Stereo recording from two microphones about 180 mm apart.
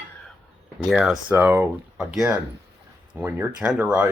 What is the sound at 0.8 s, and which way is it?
Speech, centre (ahead or behind).